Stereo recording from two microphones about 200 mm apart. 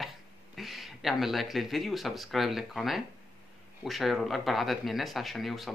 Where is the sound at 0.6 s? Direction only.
Centre (ahead or behind).